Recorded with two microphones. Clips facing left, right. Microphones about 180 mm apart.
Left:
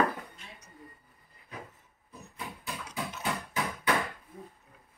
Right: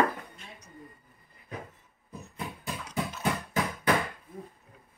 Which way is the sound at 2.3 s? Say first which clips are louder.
Right 3 dB; 20° right (ahead or behind).